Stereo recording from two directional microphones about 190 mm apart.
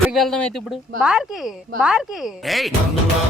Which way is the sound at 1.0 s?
5° right (ahead or behind).